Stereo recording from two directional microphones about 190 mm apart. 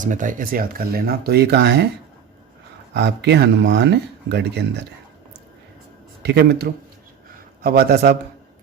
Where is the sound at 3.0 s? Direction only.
65° right (ahead or behind).